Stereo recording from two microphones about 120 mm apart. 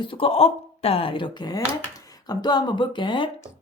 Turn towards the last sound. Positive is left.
turn(degrees=40)  # may be behind; listen again after turning